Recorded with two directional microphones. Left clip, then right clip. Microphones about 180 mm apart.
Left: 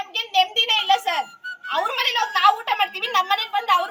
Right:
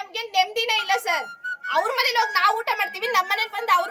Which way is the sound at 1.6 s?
25° right (ahead or behind).